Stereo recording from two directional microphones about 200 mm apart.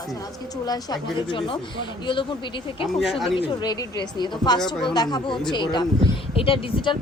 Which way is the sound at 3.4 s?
20° left (ahead or behind).